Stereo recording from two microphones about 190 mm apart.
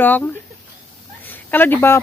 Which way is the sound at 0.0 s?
10° left (ahead or behind).